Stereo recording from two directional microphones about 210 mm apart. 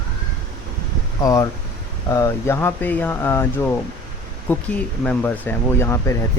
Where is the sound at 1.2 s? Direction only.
15° left (ahead or behind).